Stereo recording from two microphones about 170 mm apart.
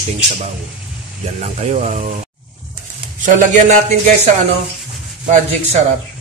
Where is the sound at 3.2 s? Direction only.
45° right (ahead or behind).